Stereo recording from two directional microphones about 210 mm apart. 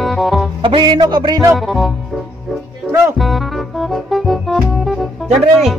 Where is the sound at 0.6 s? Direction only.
20° right (ahead or behind).